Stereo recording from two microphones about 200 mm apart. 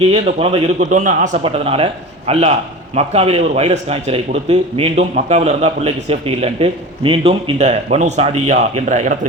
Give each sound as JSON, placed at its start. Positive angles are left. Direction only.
{"t": 0.0, "sound": "a man's voice", "side_deg": -30}